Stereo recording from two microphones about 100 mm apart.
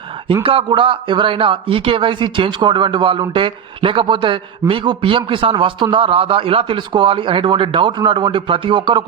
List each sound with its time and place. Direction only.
0.4 s speech: 65° right (ahead or behind)